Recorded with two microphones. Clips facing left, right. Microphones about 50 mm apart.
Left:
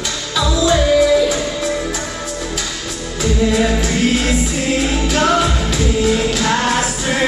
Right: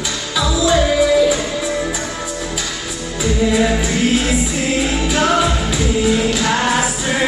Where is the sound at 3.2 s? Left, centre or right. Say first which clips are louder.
Even; centre.